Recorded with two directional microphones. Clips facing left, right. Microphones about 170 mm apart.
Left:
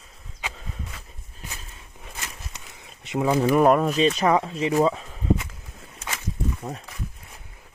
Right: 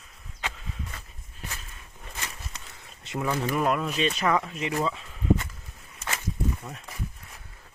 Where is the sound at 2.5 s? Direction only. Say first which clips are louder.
Left 1 dB; 15° left (ahead or behind).